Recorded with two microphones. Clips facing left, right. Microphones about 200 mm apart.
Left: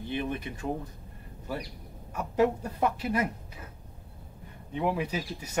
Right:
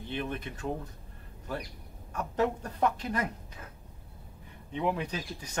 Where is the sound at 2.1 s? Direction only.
10° left (ahead or behind).